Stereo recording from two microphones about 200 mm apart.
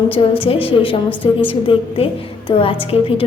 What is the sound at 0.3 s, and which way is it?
Speech, 25° left (ahead or behind).